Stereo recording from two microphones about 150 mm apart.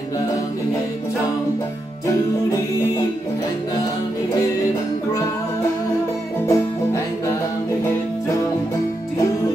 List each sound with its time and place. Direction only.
6.4 s music: 20° left (ahead or behind)